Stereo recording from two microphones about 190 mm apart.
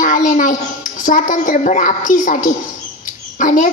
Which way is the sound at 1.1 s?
45° left (ahead or behind).